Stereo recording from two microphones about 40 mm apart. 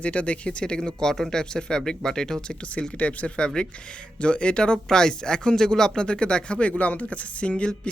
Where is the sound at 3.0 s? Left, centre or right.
Left.